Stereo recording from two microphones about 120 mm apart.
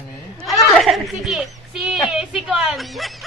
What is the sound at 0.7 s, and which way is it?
A woman's voice, centre (ahead or behind).